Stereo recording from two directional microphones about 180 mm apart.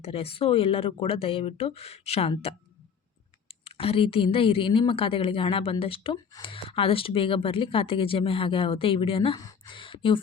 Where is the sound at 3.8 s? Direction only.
30° left (ahead or behind).